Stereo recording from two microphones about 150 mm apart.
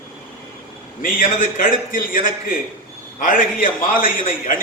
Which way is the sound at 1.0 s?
65° left (ahead or behind).